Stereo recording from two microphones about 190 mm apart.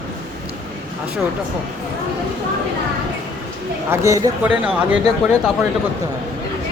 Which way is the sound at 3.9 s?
15° right (ahead or behind).